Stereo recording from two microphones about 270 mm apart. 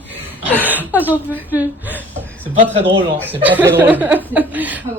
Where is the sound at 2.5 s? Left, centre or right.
Right.